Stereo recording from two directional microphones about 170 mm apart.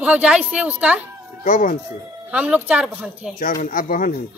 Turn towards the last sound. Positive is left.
turn(degrees=55)  # may be behind; listen again after turning